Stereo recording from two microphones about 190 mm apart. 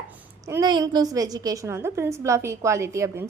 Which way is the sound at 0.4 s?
20° right (ahead or behind).